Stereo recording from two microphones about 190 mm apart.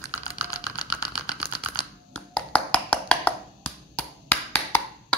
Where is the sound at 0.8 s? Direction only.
20° left (ahead or behind).